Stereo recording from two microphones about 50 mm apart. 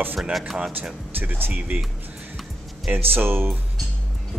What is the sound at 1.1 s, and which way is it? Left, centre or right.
Speech, right.